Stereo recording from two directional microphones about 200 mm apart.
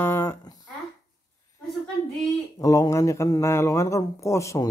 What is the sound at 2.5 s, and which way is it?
Speech, 15° left (ahead or behind).